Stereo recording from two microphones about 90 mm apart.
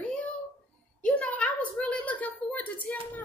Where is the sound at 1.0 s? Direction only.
15° left (ahead or behind).